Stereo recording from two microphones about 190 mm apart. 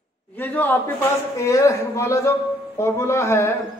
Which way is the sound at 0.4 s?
10° left (ahead or behind).